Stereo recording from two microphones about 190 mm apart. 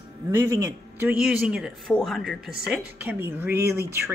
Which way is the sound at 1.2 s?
5° right (ahead or behind).